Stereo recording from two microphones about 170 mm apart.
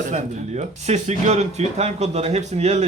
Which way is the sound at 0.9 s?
40° right (ahead or behind).